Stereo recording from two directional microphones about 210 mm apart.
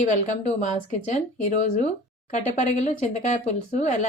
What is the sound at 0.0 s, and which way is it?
Speech, 35° left (ahead or behind).